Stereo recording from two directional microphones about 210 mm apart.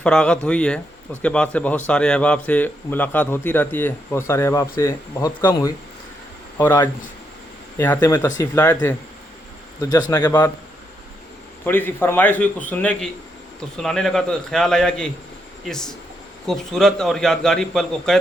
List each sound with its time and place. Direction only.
0.0 s a man's voice: 5° left (ahead or behind)
7.9 s a man's voice: 15° left (ahead or behind)
10.1 s a man's voice: 20° left (ahead or behind)
11.6 s a man's voice: 10° left (ahead or behind)